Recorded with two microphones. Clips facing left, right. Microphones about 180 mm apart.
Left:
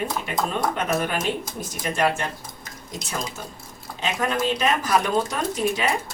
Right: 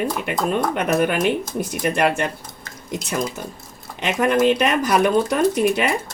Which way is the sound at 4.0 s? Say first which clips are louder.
Right 7 dB; 65° right (ahead or behind).